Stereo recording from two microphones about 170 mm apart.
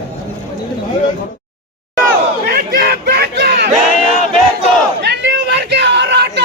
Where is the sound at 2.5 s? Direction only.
65° right (ahead or behind); by 3.7 s 85° right.